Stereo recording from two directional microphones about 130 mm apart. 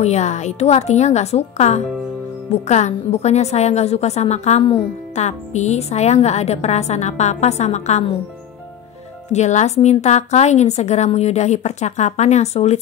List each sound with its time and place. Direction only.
0.0 s a woman's voice: 60° left (ahead or behind)
9.3 s a woman's voice: 65° left (ahead or behind)